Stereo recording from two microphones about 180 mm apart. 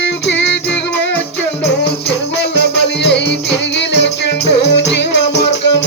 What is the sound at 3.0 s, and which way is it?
Music, 70° left (ahead or behind).